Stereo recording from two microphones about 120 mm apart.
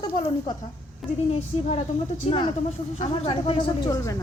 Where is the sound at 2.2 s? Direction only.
40° left (ahead or behind).